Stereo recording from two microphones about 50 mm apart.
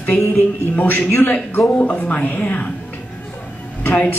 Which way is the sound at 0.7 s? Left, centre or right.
Left.